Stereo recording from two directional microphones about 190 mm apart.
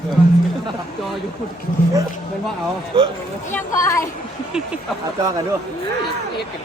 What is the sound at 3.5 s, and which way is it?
Speech, 15° left (ahead or behind).